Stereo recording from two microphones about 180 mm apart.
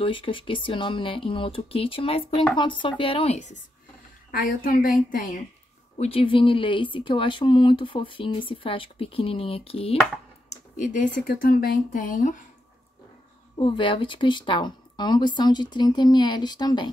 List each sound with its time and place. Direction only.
0.0 s speech: 30° left (ahead or behind)
4.3 s speech: 50° left (ahead or behind)
5.9 s speech: 30° left (ahead or behind)
10.5 s speech: 45° left (ahead or behind)
13.6 s speech: 30° left (ahead or behind)